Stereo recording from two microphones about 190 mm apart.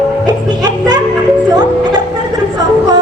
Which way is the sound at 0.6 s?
20° right (ahead or behind).